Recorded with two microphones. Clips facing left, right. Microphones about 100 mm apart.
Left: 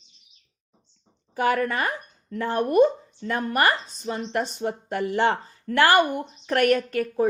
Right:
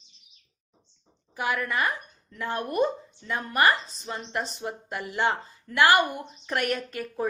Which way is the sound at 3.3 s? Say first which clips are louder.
Left 1 dB; 50° left (ahead or behind).